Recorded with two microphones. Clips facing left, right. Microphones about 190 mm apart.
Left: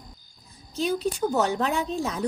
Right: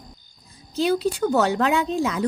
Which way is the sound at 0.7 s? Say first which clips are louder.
Right 4 dB; 90° right.